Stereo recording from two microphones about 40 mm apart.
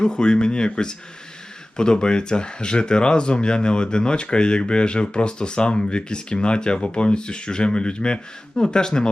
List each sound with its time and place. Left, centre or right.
0.0 s speech: left